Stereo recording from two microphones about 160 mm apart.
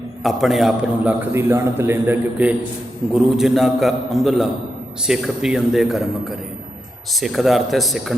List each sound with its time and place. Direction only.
0.2 s a man's voice: centre (ahead or behind)
7.1 s a man's voice: centre (ahead or behind)